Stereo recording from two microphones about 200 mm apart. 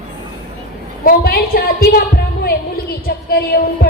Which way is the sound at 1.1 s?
50° left (ahead or behind).